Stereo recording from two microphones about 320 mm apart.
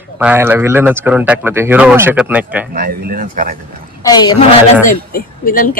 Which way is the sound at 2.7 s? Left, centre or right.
Right.